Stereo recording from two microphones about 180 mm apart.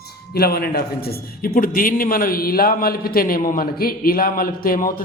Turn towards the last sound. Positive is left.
turn(degrees=50)  # may be behind; listen again after turning